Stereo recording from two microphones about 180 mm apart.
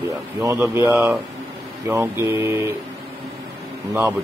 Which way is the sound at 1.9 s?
15° right (ahead or behind).